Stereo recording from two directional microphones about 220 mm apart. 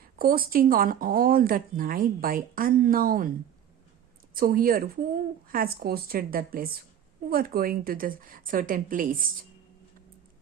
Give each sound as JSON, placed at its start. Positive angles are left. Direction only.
{"t": 0.2, "sound": "speech", "side_deg": -40}
{"t": 4.4, "sound": "a woman's voice", "side_deg": -40}